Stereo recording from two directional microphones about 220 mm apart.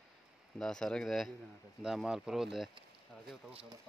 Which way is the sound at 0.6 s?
5° left (ahead or behind).